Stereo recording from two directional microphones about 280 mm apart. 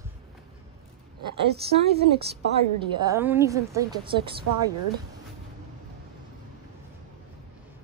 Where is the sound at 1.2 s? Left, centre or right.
Right.